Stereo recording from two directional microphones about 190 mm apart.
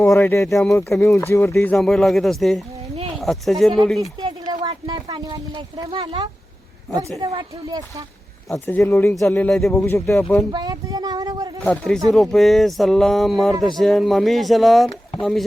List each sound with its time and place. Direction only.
0.0 s speech: 15° left (ahead or behind)
1.7 s speech: centre (ahead or behind)
4.0 s speech: 20° right (ahead or behind)
8.9 s speech: 15° left (ahead or behind)
9.7 s speech: 15° left (ahead or behind)
10.5 s speech: 20° right (ahead or behind)
11.6 s speech: 5° left (ahead or behind)